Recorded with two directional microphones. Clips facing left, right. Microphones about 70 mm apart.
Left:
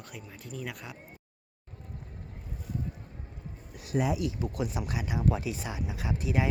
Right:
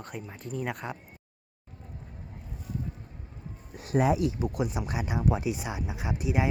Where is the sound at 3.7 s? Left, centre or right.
Right.